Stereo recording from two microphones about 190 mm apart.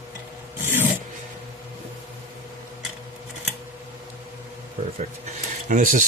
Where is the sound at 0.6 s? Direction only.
10° right (ahead or behind).